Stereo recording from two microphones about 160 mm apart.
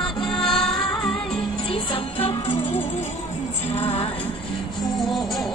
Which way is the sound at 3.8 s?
40° left (ahead or behind).